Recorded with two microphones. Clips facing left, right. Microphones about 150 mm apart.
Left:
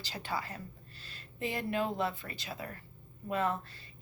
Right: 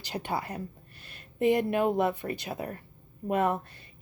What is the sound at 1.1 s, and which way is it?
A woman's voice, 60° right (ahead or behind).